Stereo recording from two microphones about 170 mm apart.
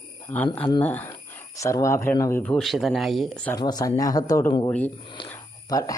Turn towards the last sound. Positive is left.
turn(degrees=20)  # may be behind; listen again after turning